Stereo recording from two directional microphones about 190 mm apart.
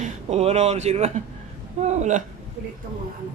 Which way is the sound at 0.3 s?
35° right (ahead or behind).